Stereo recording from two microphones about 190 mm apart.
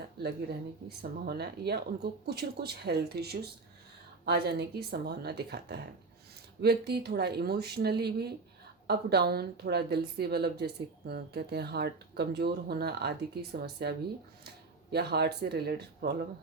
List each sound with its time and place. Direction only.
0.2 s a woman's voice: 60° right (ahead or behind)
14.9 s a woman's voice: 60° right (ahead or behind)